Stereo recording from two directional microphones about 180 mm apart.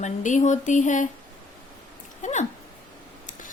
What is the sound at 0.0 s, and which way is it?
A woman's voice, 45° left (ahead or behind).